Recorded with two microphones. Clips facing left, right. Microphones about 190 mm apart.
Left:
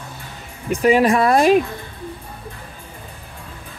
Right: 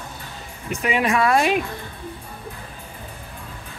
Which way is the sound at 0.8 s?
35° left (ahead or behind).